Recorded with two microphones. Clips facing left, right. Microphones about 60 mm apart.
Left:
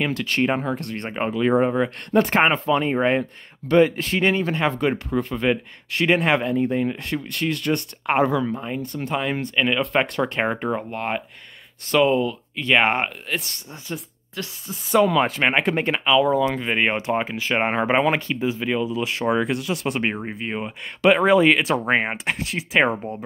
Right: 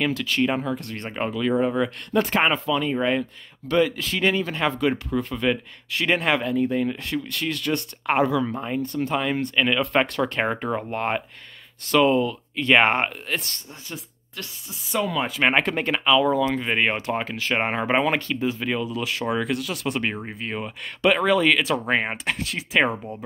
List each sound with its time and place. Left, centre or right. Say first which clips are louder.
0.1 s speech: left 1 dB; left
1.1 s speech: left 3 dB; left
8.5 s speech: right 2 dB; centre
10.0 s speech: left 1 dB; left
10.4 s speech: left 1 dB; centre
13.4 s speech: left 1 dB; centre
14.7 s speech: left 8 dB; left
15.6 s speech: left 2 dB; centre
16.0 s speech: even; centre
16.9 s speech: left 3 dB; centre